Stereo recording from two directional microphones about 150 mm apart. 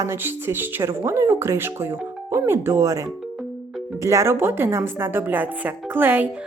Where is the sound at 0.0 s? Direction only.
15° right (ahead or behind).